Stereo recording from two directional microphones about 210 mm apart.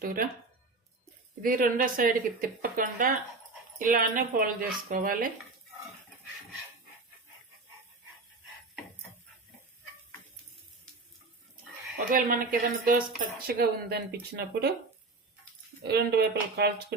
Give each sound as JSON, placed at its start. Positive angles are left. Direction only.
{"t": 0.0, "sound": "speech", "side_deg": -45}
{"t": 1.4, "sound": "speech", "side_deg": -40}
{"t": 11.9, "sound": "speech", "side_deg": -40}
{"t": 15.8, "sound": "speech", "side_deg": -50}